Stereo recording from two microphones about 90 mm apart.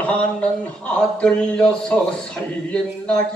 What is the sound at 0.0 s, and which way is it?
Speech, 15° left (ahead or behind).